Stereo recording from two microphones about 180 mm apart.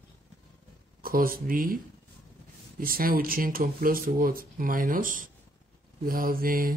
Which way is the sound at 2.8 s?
50° right (ahead or behind).